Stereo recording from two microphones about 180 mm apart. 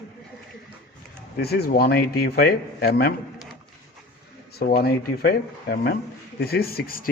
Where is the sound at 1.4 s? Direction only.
60° left (ahead or behind).